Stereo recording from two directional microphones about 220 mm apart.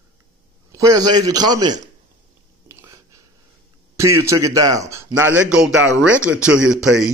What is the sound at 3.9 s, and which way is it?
Speech, 10° right (ahead or behind).